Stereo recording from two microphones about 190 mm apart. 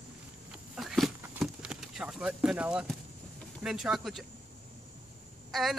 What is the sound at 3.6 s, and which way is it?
Speech, centre (ahead or behind).